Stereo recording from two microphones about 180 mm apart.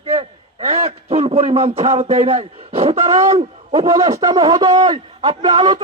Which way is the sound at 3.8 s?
20° right (ahead or behind).